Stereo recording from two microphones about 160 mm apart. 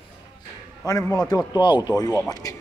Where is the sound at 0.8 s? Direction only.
20° left (ahead or behind).